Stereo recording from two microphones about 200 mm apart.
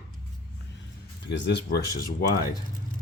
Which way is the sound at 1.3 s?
60° left (ahead or behind).